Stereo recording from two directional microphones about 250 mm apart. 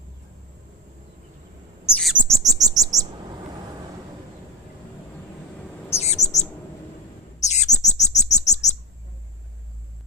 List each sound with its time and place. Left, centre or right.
2.0 s bird: centre
2.2 s chirp: centre
5.9 s bird: left